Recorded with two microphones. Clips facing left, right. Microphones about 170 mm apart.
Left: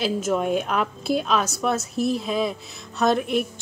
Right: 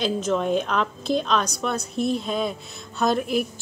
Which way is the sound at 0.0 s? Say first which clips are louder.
Even; 10° left (ahead or behind).